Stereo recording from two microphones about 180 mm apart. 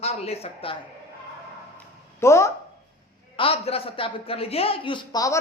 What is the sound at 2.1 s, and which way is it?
Speech, 15° left (ahead or behind).